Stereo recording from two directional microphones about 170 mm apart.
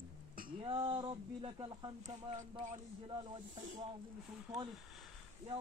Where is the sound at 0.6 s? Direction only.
30° right (ahead or behind).